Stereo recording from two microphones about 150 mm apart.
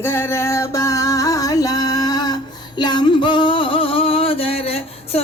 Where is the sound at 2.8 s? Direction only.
30° left (ahead or behind).